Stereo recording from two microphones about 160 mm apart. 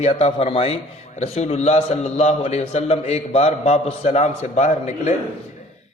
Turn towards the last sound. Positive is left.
turn(degrees=45)  # may be behind; listen again after turning